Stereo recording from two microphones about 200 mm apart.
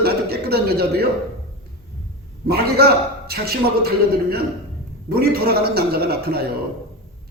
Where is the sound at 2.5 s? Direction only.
50° right (ahead or behind).